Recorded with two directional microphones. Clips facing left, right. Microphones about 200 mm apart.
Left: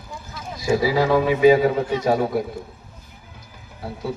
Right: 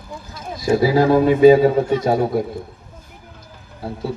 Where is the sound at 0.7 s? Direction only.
50° right (ahead or behind).